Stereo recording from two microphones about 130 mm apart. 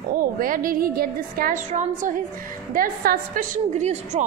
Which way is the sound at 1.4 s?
75° right (ahead or behind).